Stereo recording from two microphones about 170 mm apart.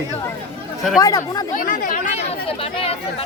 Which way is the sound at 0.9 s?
20° left (ahead or behind).